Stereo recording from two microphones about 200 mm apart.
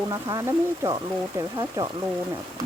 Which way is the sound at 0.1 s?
15° right (ahead or behind).